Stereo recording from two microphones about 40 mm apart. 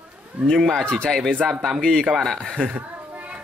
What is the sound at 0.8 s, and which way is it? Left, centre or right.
Speech, left.